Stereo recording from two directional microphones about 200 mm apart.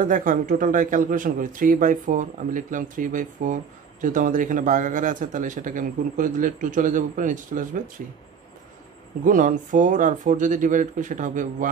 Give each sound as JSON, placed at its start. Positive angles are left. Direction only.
{"t": 0.0, "sound": "a man's voice", "side_deg": -40}
{"t": 9.2, "sound": "a man's voice", "side_deg": -40}